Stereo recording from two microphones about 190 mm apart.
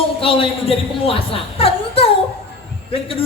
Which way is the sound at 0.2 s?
30° left (ahead or behind).